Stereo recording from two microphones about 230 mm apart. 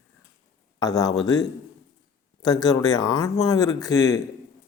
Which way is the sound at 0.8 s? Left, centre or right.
Centre.